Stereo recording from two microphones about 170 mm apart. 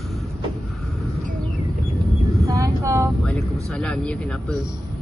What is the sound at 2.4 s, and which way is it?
Vehicle, 20° right (ahead or behind).